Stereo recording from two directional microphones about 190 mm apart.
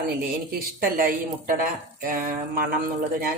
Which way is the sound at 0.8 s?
50° right (ahead or behind).